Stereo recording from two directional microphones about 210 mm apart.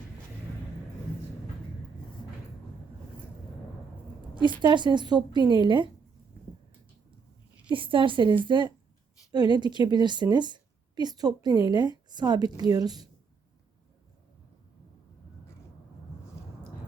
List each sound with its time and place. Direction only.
4.4 s a woman's voice: 20° right (ahead or behind)
7.7 s a woman's voice: 25° right (ahead or behind)